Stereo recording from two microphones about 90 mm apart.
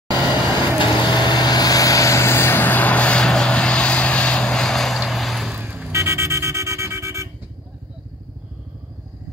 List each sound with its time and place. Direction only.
0.7 s vehicle: 55° left (ahead or behind); by 5.5 s centre (ahead or behind)
5.5 s vehicle: 15° right (ahead or behind)
5.9 s vehicle: 30° right (ahead or behind)